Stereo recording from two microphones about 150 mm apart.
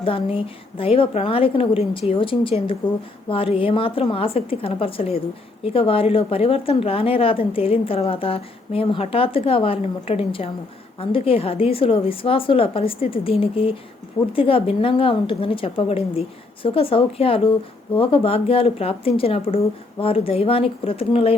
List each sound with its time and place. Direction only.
0.0 s a woman's voice: 40° left (ahead or behind)